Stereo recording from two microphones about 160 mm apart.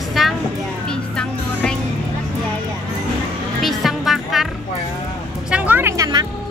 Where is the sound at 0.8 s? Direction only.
5° left (ahead or behind).